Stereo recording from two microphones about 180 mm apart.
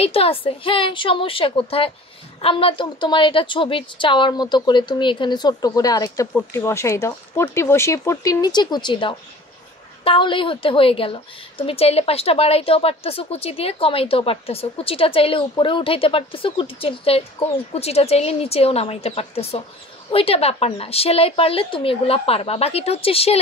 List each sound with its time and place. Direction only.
0.0 s a woman's voice: 30° left (ahead or behind)